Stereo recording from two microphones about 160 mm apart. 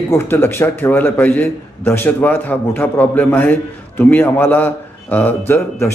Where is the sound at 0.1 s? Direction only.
15° left (ahead or behind).